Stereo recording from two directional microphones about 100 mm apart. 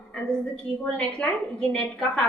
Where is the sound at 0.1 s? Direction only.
10° left (ahead or behind).